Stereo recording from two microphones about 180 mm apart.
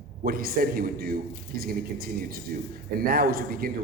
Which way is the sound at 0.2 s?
55° right (ahead or behind).